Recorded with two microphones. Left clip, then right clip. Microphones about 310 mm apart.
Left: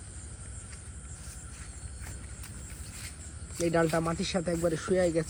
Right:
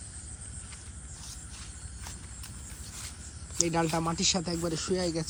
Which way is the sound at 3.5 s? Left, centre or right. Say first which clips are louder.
Left 2 dB; centre.